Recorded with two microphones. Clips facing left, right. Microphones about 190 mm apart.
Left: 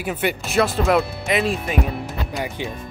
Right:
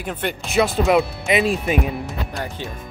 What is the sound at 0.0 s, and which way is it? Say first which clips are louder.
Speech: left 3 dB; 5° left (ahead or behind).